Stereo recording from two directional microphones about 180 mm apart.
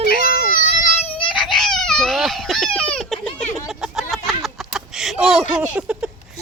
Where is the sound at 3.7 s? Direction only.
Centre (ahead or behind).